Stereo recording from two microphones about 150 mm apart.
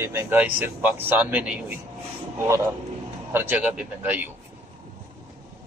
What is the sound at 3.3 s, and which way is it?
A man's voice, 15° right (ahead or behind).